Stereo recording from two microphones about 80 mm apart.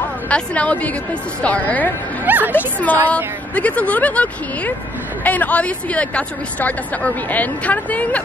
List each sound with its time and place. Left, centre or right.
0.3 s speech: centre
2.2 s a sound: right
2.5 s speech: left